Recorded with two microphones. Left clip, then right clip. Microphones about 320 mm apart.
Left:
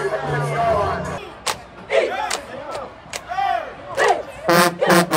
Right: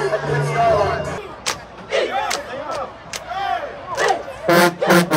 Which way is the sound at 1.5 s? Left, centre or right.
Left.